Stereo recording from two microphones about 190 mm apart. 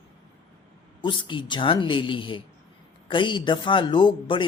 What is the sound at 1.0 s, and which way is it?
Speech, 25° left (ahead or behind).